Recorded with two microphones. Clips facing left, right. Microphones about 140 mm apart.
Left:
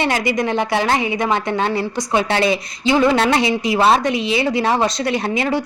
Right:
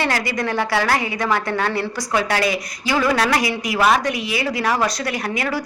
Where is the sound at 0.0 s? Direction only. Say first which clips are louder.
Left 3 dB; 20° left (ahead or behind).